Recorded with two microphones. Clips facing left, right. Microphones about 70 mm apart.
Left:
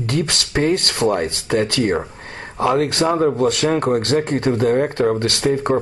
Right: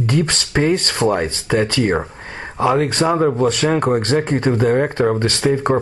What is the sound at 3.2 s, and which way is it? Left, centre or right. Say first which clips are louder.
Speech: right 1 dB; right.